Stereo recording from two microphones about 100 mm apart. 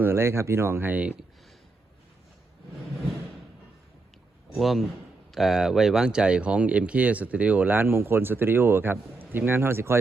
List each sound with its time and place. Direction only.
0.0 s speech: 25° right (ahead or behind)
4.5 s a man's voice: centre (ahead or behind); by 10.0 s 25° right (ahead or behind)